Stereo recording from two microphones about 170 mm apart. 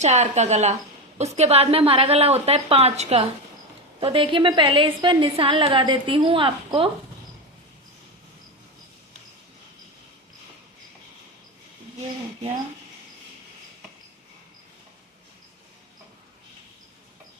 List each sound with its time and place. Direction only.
0.0 s a woman's voice: 40° right (ahead or behind)